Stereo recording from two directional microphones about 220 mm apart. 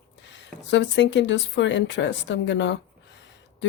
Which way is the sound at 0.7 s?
55° left (ahead or behind).